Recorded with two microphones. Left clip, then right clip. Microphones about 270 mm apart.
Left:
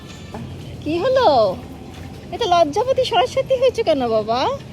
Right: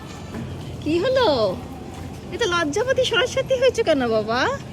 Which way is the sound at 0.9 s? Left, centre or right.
Centre.